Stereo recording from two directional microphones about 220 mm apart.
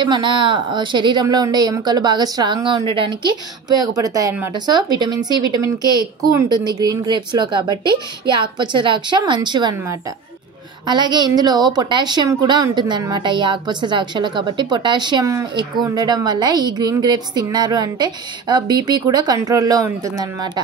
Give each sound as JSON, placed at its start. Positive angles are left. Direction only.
{"t": 0.0, "sound": "a woman's voice", "side_deg": -20}